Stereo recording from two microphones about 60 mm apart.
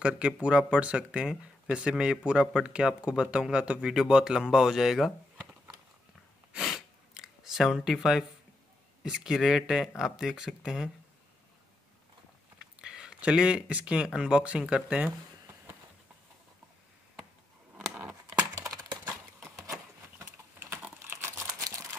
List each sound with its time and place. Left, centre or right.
0.0 s speech: centre
6.6 s a sound: centre
9.0 s speech: centre
12.5 s speech: centre
20.2 s typing: right
21.2 s crumpling: right
21.5 s camera: right